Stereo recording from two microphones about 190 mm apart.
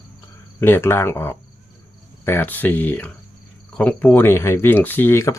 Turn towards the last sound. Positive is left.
turn(degrees=15)  # may be behind; listen again after turning